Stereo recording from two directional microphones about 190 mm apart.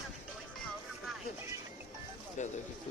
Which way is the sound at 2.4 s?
40° left (ahead or behind).